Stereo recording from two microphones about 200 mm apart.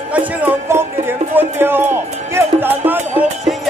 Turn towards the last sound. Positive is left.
turn(degrees=-10)  # may be behind; listen again after turning